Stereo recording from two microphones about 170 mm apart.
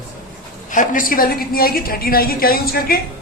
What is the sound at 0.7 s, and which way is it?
A woman's voice, 50° left (ahead or behind).